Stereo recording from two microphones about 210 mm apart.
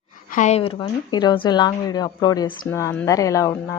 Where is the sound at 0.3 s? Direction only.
35° left (ahead or behind).